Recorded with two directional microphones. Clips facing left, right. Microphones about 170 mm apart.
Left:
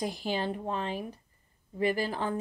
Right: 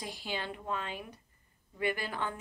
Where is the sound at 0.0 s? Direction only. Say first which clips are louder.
Left 7 dB; 40° left (ahead or behind).